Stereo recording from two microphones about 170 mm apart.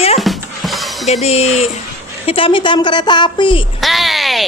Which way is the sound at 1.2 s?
40° left (ahead or behind).